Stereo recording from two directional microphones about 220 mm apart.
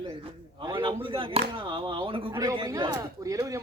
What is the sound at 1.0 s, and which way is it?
A man's voice, 25° right (ahead or behind).